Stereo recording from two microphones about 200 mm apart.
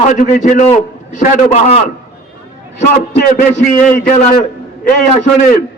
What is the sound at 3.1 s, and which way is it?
A man's voice, 40° left (ahead or behind).